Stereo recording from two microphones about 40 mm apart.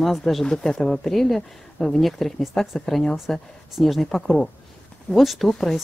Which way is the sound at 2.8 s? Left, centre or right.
Centre.